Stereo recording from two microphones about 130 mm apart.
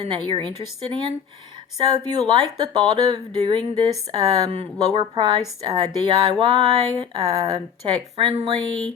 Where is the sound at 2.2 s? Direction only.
35° right (ahead or behind).